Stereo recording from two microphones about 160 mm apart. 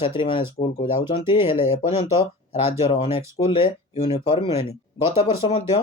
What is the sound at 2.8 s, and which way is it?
Speech, 40° left (ahead or behind).